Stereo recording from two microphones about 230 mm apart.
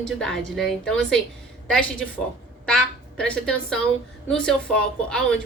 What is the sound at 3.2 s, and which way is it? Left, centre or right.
Speech, centre.